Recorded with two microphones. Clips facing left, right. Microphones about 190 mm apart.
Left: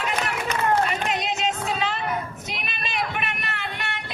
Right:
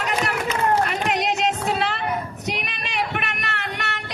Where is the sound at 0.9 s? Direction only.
70° right (ahead or behind).